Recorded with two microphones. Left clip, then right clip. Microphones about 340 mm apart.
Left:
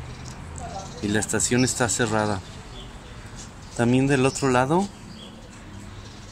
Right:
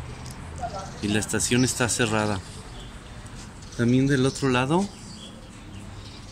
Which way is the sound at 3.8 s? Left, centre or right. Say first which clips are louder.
Left 2 dB; left.